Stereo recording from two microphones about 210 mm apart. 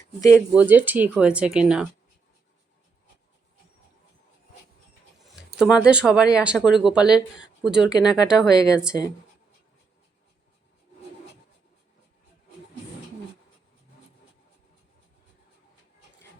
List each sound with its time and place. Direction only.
0.2 s speech: 15° left (ahead or behind)
0.5 s speech: 10° right (ahead or behind)
5.5 s speech: 5° right (ahead or behind)
7.9 s speech: 15° left (ahead or behind)
8.7 s speech: 5° right (ahead or behind)